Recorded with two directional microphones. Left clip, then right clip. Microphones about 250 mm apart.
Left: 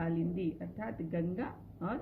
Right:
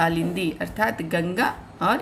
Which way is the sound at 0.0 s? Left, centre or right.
Right.